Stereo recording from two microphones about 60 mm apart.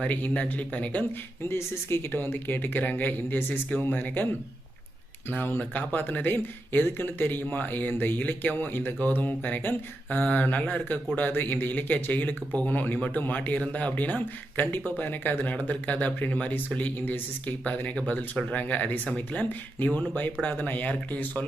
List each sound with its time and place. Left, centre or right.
0.0 s speech: left
1.5 s speech: left
5.3 s speech: left
18.5 s speech: left